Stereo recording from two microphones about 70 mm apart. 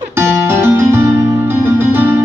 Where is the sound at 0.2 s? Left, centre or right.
Right.